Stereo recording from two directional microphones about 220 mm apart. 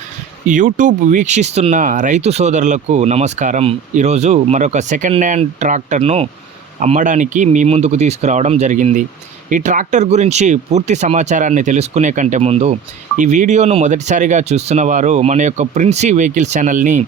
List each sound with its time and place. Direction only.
0.4 s speech: 35° right (ahead or behind)